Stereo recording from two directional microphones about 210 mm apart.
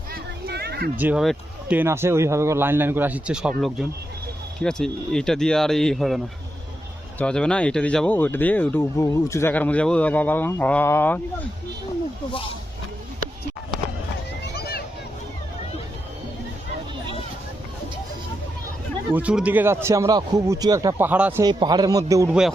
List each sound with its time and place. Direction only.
0.1 s a sound: 45° right (ahead or behind)
0.9 s a man's voice: 5° right (ahead or behind); by 11.2 s 10° left (ahead or behind)
19.1 s a man's voice: 5° right (ahead or behind)
21.4 s a man's voice: 20° right (ahead or behind)
22.3 s speech: 5° right (ahead or behind)